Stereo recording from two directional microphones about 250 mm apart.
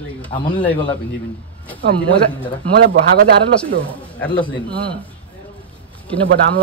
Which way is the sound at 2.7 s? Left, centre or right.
Right.